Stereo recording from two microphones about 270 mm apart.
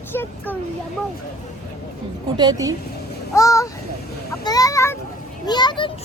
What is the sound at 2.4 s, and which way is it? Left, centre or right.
Speech, centre.